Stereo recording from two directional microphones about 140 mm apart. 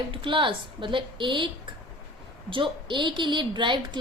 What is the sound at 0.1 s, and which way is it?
A woman's voice, 35° right (ahead or behind).